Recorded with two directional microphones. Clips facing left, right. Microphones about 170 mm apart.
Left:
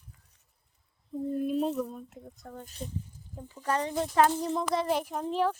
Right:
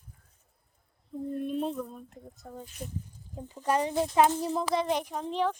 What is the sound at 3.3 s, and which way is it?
Speech, 20° right (ahead or behind).